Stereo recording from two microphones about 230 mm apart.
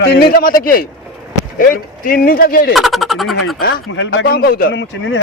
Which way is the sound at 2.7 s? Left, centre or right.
Centre.